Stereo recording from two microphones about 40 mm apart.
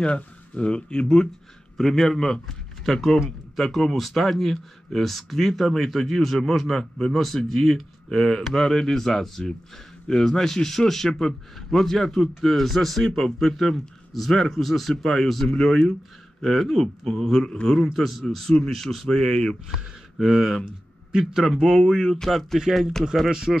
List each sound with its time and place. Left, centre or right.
0.0 s speech: left
1.8 s a man's voice: centre
17.9 s a man's voice: centre
19.0 s a man's voice: centre
20.2 s a man's voice: centre
21.1 s a man's voice: centre
21.6 s a man's voice: centre
22.0 s a man's voice: centre
22.6 s a man's voice: centre
23.3 s speech: centre